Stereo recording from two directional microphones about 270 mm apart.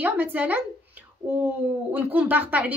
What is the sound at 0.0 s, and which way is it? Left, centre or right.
A woman's voice, centre.